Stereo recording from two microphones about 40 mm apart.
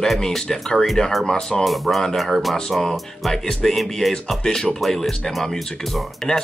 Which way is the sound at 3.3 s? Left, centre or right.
Centre.